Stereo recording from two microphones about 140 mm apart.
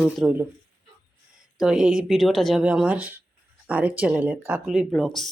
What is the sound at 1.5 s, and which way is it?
Speech, 5° right (ahead or behind).